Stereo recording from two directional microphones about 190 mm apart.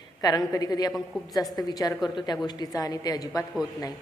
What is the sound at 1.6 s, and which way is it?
A woman's voice, 20° left (ahead or behind).